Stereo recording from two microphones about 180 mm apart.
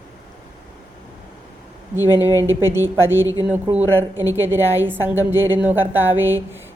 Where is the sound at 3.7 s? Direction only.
20° right (ahead or behind).